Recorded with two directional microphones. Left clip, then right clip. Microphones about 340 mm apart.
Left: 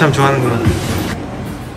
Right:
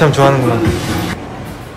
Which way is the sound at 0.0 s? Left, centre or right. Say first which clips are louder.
Right 2 dB; centre.